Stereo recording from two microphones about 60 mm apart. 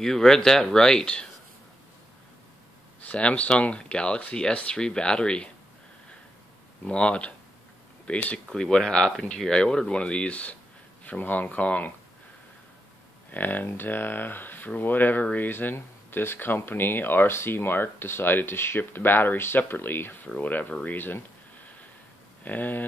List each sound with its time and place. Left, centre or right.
0.0 s speech: centre
3.1 s speech: left
6.8 s speech: centre
8.5 s speech: centre
13.3 s speech: left
22.4 s speech: left